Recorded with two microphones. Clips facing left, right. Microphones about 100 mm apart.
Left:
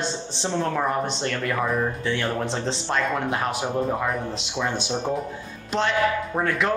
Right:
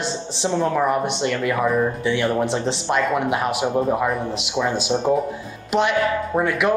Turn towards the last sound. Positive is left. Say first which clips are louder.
# right 4 dB
turn(degrees=-15)  # may be behind; listen again after turning